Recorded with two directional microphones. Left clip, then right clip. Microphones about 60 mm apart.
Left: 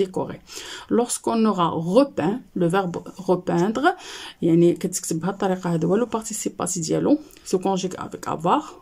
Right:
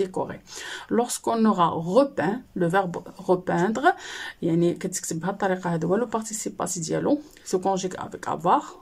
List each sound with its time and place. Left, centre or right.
0.0 s speech: centre